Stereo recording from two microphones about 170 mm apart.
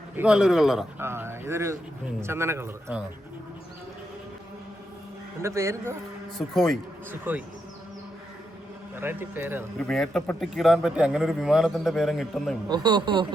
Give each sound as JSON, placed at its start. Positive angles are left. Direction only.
{"t": 0.2, "sound": "a man's voice", "side_deg": -5}
{"t": 0.9, "sound": "speech", "side_deg": -15}
{"t": 5.4, "sound": "speech", "side_deg": -15}
{"t": 6.5, "sound": "a man's voice", "side_deg": 0}
{"t": 7.1, "sound": "speech", "side_deg": -10}
{"t": 9.0, "sound": "speech", "side_deg": -10}
{"t": 9.7, "sound": "a man's voice", "side_deg": 5}
{"t": 12.6, "sound": "speech", "side_deg": -25}